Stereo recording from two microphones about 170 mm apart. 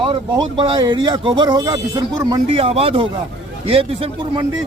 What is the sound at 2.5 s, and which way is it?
A man's voice, 35° right (ahead or behind).